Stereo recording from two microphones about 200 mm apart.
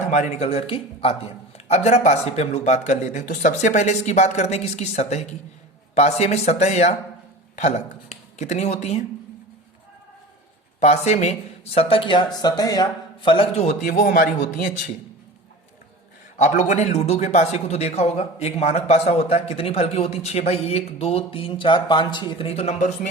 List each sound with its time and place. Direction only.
0.1 s a man's voice: 35° left (ahead or behind)
10.8 s speech: 35° left (ahead or behind)
13.8 s a man's voice: 45° left (ahead or behind)
16.4 s a man's voice: 35° left (ahead or behind)